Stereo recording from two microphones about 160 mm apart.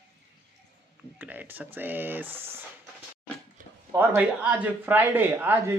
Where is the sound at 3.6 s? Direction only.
60° right (ahead or behind).